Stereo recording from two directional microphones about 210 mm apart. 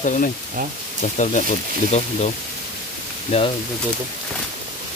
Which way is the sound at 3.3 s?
30° left (ahead or behind).